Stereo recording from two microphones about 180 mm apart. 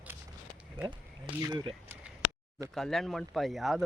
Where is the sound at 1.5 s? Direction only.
25° right (ahead or behind).